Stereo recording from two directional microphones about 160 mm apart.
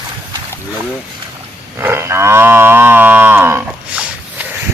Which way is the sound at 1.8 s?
15° right (ahead or behind).